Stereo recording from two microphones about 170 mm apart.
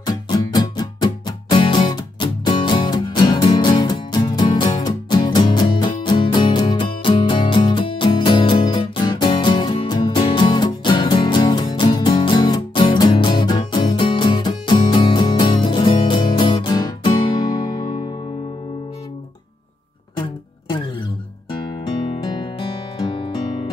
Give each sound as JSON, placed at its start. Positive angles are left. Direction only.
{"t": 0.0, "sound": "music", "side_deg": 25}
{"t": 22.1, "sound": "music", "side_deg": 30}